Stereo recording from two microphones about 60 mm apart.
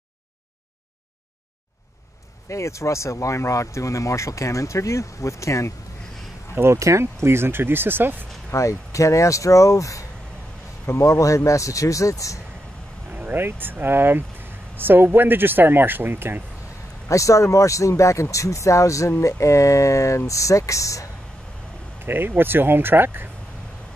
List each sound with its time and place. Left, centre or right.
2.5 s speech: left
6.5 s speech: right
8.5 s speech: left
13.1 s speech: right
17.1 s speech: left
22.0 s speech: right